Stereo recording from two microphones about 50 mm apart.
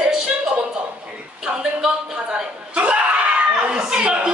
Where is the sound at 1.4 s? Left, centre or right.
Centre.